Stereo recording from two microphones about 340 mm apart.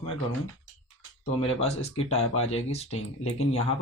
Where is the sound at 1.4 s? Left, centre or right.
Centre.